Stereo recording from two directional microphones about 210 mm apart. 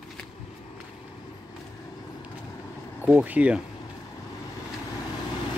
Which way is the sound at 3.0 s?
5° right (ahead or behind).